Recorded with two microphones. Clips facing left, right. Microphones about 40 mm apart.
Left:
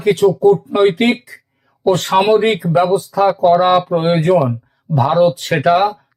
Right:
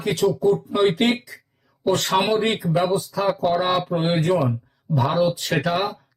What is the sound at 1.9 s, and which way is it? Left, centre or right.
Speech, left.